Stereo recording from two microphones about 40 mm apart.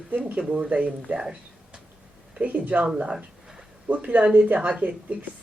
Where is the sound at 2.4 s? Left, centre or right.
Right.